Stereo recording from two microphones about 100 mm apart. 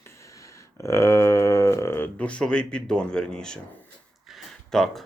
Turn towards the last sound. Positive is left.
turn(degrees=0)  # may be behind; listen again after turning